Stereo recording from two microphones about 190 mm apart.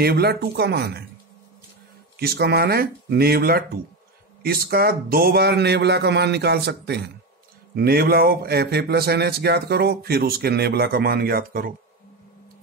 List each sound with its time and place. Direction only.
0.0 s speech: 55° right (ahead or behind)
2.1 s speech: 55° right (ahead or behind)